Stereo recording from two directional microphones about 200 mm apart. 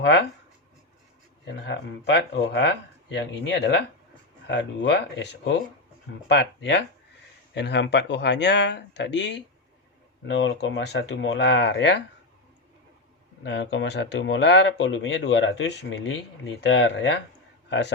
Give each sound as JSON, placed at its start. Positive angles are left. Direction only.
{"t": 0.0, "sound": "speech", "side_deg": 60}
{"t": 1.5, "sound": "speech", "side_deg": 65}
{"t": 13.4, "sound": "a man's voice", "side_deg": 60}